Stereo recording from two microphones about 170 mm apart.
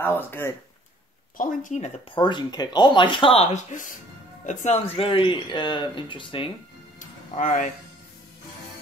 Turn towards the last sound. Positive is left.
turn(degrees=50)  # may be behind; listen again after turning